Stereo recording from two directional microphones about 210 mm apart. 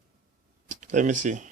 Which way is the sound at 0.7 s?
35° right (ahead or behind).